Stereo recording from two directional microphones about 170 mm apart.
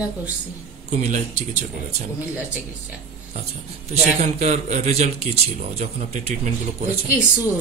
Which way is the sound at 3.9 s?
40° right (ahead or behind).